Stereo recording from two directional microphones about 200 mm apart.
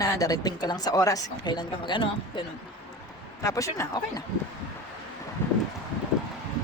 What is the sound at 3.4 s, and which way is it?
Speech, 15° left (ahead or behind).